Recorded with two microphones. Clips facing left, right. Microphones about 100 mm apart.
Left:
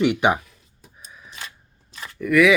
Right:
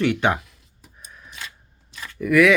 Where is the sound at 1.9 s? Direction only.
30° left (ahead or behind).